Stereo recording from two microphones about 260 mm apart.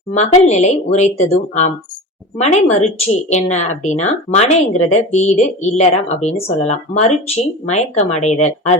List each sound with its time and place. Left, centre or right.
0.1 s speech: left